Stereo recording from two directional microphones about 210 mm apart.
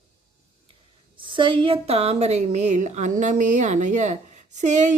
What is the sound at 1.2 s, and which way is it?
A woman's voice, 25° right (ahead or behind).